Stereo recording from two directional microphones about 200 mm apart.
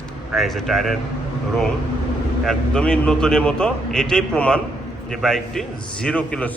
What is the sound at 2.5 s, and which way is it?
A man's voice, 5° left (ahead or behind).